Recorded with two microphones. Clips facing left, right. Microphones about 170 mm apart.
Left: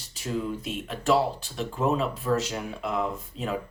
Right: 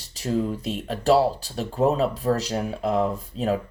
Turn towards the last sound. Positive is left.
turn(degrees=-35)  # may be behind; listen again after turning